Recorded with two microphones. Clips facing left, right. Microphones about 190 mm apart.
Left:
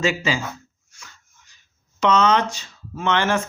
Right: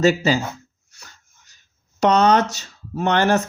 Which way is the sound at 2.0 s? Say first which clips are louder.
Right 2 dB; 40° right (ahead or behind).